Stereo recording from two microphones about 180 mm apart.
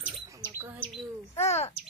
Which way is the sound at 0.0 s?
15° right (ahead or behind).